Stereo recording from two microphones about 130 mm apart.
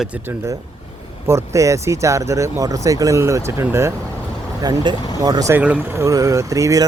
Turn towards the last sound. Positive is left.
turn(degrees=-25)  # may be behind; listen again after turning